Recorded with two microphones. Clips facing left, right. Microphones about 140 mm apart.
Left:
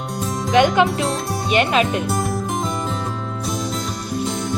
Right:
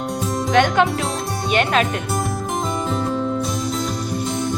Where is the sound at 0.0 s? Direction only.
Centre (ahead or behind).